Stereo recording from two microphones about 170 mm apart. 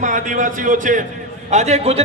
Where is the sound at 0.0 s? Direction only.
50° right (ahead or behind).